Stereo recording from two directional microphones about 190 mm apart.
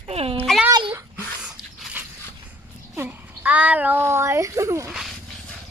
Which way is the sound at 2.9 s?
10° right (ahead or behind).